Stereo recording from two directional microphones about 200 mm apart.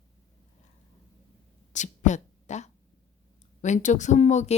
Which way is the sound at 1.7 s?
35° left (ahead or behind).